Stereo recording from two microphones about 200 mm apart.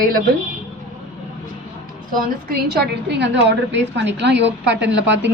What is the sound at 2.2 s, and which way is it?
A woman's voice, 50° right (ahead or behind).